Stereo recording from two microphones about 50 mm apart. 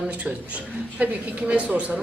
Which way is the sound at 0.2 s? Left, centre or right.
Right.